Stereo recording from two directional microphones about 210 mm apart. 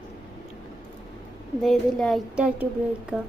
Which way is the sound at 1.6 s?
Centre (ahead or behind).